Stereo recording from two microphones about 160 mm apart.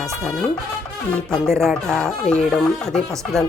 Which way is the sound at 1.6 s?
Centre (ahead or behind).